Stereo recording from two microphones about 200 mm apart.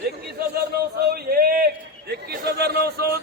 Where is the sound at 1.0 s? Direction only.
50° right (ahead or behind).